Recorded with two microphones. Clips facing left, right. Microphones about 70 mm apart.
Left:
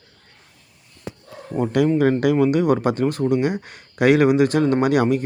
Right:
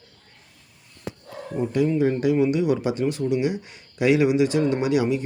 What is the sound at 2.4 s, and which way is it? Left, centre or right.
Speech, left.